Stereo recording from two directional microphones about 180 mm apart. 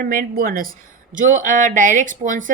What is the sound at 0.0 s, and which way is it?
A woman's voice, 55° right (ahead or behind).